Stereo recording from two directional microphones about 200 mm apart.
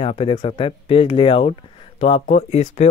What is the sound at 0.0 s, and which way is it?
Speech, 25° left (ahead or behind).